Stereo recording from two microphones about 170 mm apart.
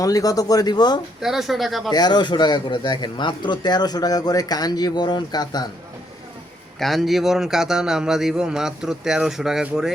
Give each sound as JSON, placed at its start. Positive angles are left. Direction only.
{"t": 0.0, "sound": "speech", "side_deg": 20}
{"t": 1.2, "sound": "a man's voice", "side_deg": 0}
{"t": 1.9, "sound": "speech", "side_deg": 25}
{"t": 6.7, "sound": "a man's voice", "side_deg": 0}